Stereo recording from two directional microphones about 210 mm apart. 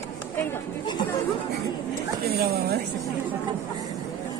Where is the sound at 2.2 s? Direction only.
45° right (ahead or behind).